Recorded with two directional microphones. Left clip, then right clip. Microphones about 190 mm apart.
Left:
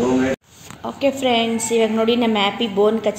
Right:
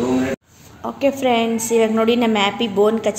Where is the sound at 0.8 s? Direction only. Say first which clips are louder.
Right 1 dB; 10° right (ahead or behind).